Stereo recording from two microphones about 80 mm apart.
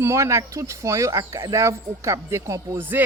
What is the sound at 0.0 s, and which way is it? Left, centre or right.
Speech, right.